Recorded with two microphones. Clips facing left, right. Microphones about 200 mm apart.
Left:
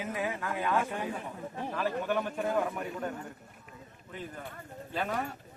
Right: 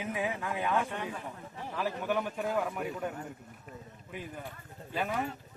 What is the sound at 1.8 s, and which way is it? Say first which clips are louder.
Speech: left 1 dB; 10° right (ahead or behind).